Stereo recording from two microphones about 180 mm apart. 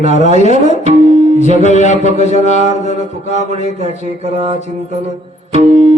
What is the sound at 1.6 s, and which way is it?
Speech, 40° left (ahead or behind).